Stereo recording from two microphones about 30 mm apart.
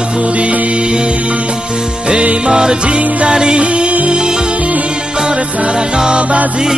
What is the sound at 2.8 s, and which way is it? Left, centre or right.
Music, right.